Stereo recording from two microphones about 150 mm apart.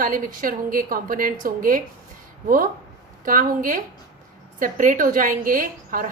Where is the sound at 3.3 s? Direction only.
65° right (ahead or behind).